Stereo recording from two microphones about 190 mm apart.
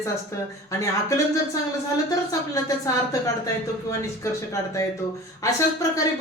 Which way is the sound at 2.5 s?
15° left (ahead or behind).